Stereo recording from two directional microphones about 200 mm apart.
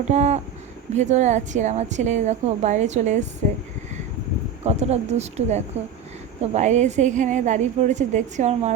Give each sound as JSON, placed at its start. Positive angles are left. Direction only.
{"t": 0.1, "sound": "a woman's voice", "side_deg": -35}
{"t": 4.6, "sound": "a woman's voice", "side_deg": -35}